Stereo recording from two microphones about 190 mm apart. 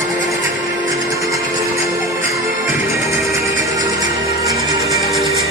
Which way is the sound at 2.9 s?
15° right (ahead or behind).